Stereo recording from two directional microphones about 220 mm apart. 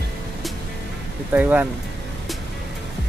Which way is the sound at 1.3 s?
10° right (ahead or behind).